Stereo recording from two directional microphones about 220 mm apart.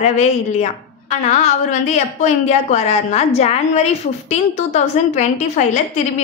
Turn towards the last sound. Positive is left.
turn(degrees=30)  # may be behind; listen again after turning